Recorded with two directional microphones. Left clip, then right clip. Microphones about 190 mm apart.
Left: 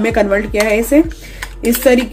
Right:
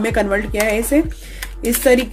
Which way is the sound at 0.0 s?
20° right (ahead or behind).